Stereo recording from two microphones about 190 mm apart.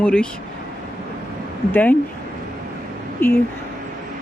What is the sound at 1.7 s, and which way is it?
Speech, 10° left (ahead or behind).